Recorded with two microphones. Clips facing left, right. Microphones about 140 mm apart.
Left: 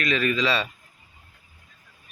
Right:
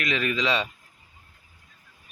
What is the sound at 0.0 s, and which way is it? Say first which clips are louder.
Speech: left 3 dB; 15° right (ahead or behind).